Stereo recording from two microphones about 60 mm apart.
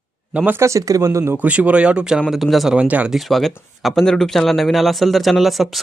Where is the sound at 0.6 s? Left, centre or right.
Right.